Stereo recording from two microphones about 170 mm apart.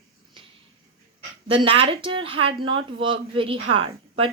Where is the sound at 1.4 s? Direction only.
30° right (ahead or behind).